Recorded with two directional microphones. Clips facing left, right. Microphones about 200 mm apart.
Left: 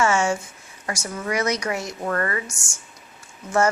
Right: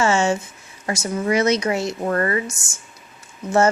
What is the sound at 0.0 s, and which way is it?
A woman's voice, 25° right (ahead or behind).